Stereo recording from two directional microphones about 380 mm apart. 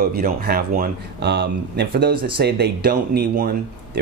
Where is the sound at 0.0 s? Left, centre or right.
Right.